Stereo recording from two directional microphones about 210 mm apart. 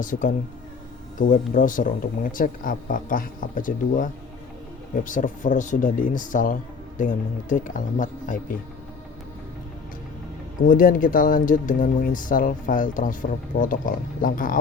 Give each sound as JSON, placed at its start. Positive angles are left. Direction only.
{"t": 0.0, "sound": "speech", "side_deg": 40}
{"t": 10.7, "sound": "speech", "side_deg": 40}